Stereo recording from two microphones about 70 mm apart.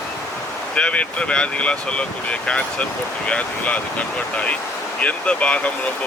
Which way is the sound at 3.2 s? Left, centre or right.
Centre.